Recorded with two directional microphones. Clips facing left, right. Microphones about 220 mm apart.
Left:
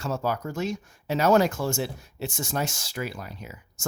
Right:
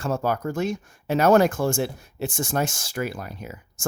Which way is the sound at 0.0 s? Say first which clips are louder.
Right 4 dB; 50° right (ahead or behind).